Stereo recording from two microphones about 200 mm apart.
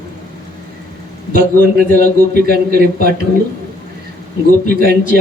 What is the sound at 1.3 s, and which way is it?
A man's voice, 50° right (ahead or behind).